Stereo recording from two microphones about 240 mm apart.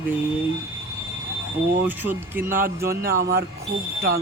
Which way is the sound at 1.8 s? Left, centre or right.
Centre.